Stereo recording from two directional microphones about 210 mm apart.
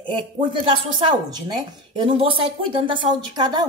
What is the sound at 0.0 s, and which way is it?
Speech, 25° right (ahead or behind).